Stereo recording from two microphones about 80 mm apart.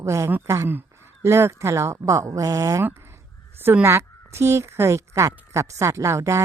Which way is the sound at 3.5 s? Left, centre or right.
Right.